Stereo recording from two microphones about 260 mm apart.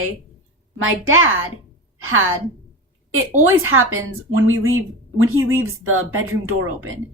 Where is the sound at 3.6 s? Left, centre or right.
Right.